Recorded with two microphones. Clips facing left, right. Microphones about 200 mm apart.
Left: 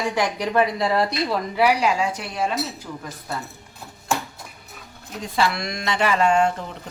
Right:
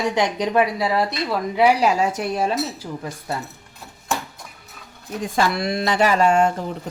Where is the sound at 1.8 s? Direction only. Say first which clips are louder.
Right 3 dB; 45° right (ahead or behind).